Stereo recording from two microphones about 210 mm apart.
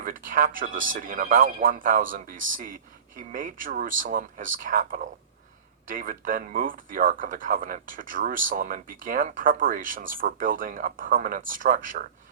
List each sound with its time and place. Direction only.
0.0 s speech: 40° right (ahead or behind)